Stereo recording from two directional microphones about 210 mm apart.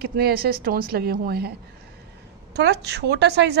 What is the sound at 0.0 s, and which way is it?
A woman's voice, 45° right (ahead or behind).